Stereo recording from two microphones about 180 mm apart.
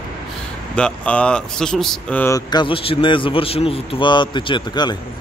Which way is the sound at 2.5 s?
25° left (ahead or behind).